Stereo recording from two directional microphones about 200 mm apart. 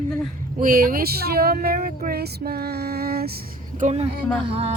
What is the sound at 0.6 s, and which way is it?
Speech, 45° right (ahead or behind).